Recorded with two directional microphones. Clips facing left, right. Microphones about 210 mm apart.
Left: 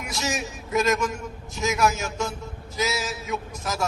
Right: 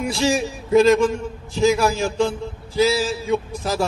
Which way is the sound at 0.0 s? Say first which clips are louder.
Right 9 dB; 30° right (ahead or behind).